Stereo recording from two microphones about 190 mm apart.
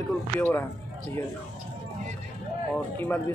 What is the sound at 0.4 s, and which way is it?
Speech, 10° left (ahead or behind).